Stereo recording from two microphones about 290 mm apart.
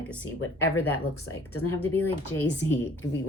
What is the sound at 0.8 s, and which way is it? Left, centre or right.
Speech, left.